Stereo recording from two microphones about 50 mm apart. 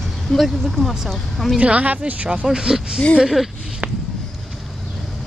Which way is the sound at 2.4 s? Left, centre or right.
Centre.